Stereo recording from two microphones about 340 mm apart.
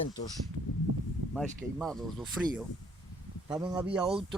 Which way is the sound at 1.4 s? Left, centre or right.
Centre.